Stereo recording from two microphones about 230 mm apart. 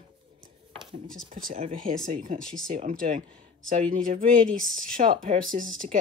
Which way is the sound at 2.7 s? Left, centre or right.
Right.